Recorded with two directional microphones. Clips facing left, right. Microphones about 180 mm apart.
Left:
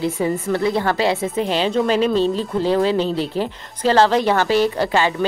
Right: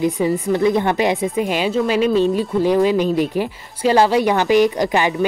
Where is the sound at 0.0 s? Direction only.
15° right (ahead or behind).